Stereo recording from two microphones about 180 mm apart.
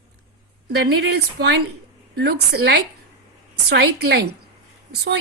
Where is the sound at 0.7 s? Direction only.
65° right (ahead or behind).